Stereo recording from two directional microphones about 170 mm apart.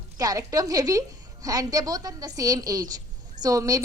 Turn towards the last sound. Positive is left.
turn(degrees=-20)  # may be behind; listen again after turning